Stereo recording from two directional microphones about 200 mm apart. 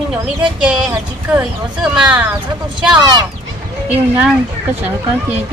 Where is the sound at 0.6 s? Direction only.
5° right (ahead or behind).